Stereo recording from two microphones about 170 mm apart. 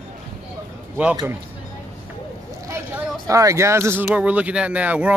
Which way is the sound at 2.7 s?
15° right (ahead or behind).